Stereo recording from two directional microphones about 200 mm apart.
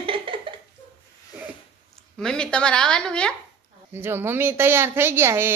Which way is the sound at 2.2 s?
5° left (ahead or behind).